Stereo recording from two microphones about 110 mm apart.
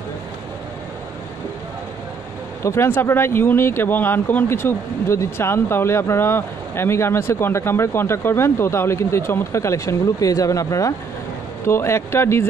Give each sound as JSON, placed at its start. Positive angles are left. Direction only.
{"t": 2.6, "sound": "speech", "side_deg": 25}